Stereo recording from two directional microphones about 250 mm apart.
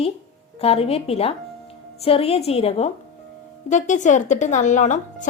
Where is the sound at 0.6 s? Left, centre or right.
Left.